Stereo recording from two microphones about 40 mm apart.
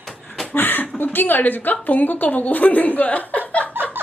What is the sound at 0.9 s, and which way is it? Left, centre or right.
A woman's voice, left.